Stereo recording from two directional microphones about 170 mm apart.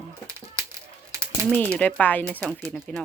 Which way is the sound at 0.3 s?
20° right (ahead or behind).